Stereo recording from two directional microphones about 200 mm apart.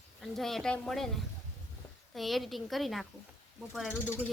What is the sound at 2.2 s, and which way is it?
Speech, centre (ahead or behind).